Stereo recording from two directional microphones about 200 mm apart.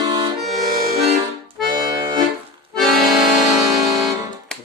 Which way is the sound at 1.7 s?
20° right (ahead or behind).